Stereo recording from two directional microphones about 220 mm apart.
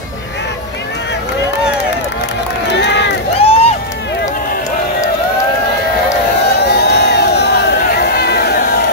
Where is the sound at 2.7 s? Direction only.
50° left (ahead or behind).